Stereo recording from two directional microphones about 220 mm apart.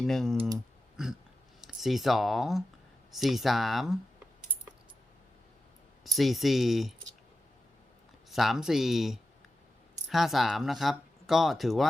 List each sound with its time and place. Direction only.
0.0 s speech: centre (ahead or behind)
0.3 s speech: 15° right (ahead or behind)
1.6 s speech: centre (ahead or behind)
6.1 s speech: centre (ahead or behind)
8.3 s speech: centre (ahead or behind)